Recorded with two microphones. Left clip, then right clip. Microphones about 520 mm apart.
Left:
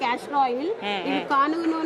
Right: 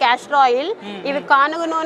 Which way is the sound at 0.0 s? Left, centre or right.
Right.